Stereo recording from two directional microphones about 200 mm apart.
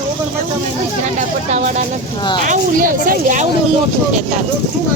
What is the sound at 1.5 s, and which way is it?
A woman's voice, 35° right (ahead or behind).